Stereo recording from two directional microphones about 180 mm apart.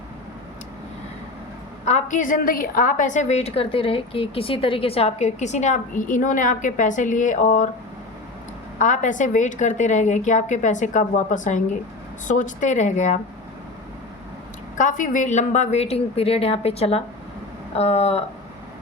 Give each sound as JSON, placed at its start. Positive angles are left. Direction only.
{"t": 1.8, "sound": "a woman's voice", "side_deg": 40}
{"t": 8.8, "sound": "a woman's voice", "side_deg": 45}
{"t": 14.8, "sound": "a woman's voice", "side_deg": 45}